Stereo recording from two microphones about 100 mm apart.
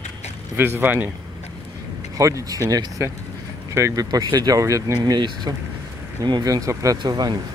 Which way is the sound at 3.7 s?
35° right (ahead or behind).